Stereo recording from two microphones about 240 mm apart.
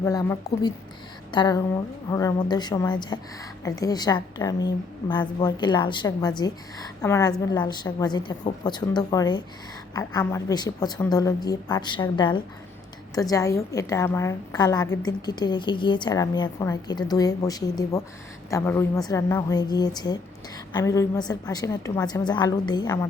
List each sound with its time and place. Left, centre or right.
0.0 s a woman's voice: centre